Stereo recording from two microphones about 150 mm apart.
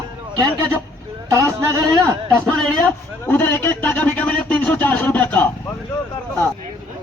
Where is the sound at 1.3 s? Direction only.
25° right (ahead or behind).